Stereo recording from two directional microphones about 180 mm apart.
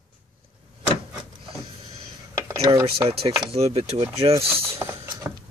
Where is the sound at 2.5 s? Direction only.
20° right (ahead or behind).